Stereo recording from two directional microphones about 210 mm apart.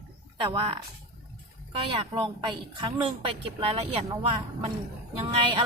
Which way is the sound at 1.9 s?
25° right (ahead or behind).